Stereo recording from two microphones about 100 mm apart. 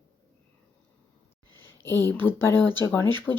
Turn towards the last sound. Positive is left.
turn(degrees=20)  # may be behind; listen again after turning